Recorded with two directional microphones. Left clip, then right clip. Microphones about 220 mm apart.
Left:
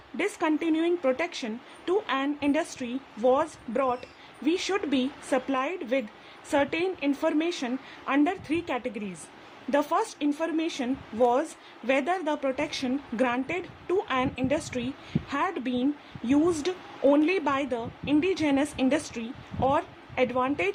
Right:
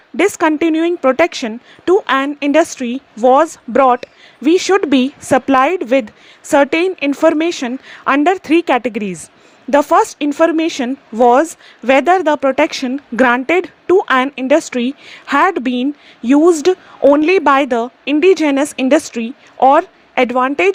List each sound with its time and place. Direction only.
0.2 s a woman's voice: 30° right (ahead or behind)